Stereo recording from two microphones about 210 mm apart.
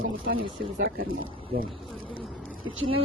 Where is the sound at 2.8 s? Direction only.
75° right (ahead or behind).